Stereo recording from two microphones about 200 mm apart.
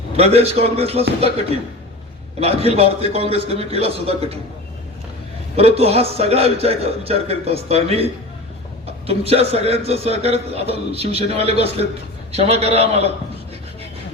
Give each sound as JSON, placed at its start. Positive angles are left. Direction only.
{"t": 0.2, "sound": "a man's voice", "side_deg": -30}
{"t": 2.4, "sound": "a man's voice", "side_deg": -30}
{"t": 5.5, "sound": "a man's voice", "side_deg": -30}